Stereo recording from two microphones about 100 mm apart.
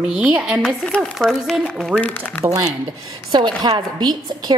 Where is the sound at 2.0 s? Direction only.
15° left (ahead or behind).